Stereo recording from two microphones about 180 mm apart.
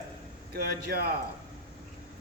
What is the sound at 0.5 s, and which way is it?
Speech, 60° right (ahead or behind).